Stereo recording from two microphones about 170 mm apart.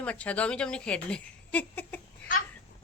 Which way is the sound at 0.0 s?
5° left (ahead or behind).